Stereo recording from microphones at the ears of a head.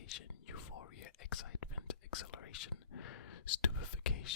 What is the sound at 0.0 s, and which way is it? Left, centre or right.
Whispering, left.